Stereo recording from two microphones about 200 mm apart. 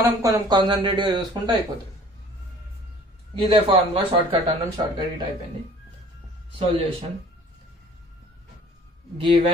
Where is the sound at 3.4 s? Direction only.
25° right (ahead or behind).